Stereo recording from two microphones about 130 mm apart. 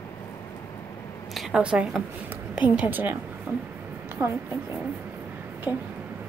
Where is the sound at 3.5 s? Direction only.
15° right (ahead or behind).